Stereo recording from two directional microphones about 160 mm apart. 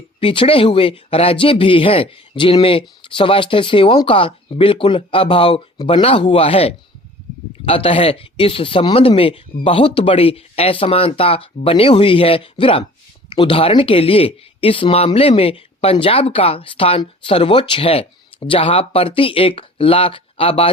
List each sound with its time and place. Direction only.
0.2 s speech: 35° left (ahead or behind)